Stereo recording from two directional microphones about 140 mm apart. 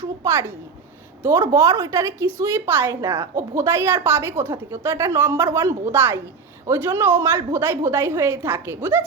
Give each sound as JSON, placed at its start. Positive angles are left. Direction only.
{"t": 0.0, "sound": "a woman's voice", "side_deg": -20}